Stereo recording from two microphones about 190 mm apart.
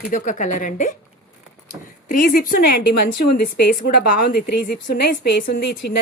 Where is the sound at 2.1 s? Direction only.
50° left (ahead or behind).